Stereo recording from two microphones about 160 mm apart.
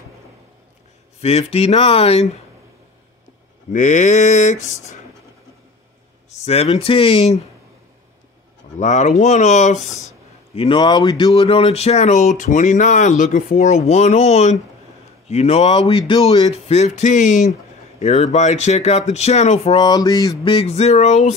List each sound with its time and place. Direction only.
1.2 s speech: 40° left (ahead or behind)
3.7 s speech: 50° left (ahead or behind)
6.3 s speech: 40° left (ahead or behind)
8.7 s speech: 50° left (ahead or behind)
19.8 s a sound: 25° left (ahead or behind)
20.5 s speech: 40° left (ahead or behind)